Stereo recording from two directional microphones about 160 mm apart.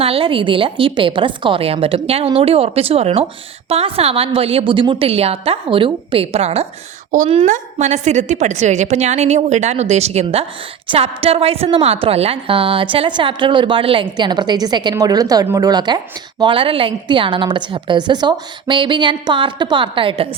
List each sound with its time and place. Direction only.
0.0 s a woman's voice: 35° right (ahead or behind)